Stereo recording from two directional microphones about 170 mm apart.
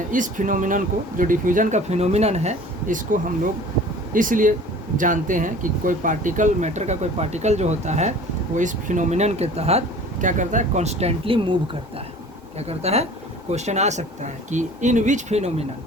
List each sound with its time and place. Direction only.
0.1 s speech: 50° right (ahead or behind)